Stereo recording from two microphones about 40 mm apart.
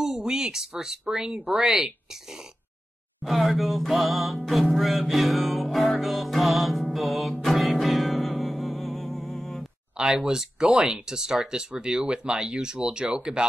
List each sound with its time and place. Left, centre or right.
0.0 s speech: centre
3.3 s music: centre
9.9 s speech: centre